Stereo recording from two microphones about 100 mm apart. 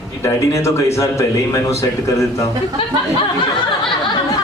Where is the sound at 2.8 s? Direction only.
60° left (ahead or behind).